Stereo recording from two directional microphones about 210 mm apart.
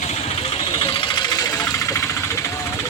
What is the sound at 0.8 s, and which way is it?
Engine, 25° left (ahead or behind).